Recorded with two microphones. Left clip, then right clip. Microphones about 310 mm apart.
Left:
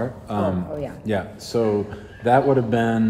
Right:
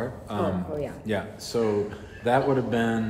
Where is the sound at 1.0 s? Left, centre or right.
Left.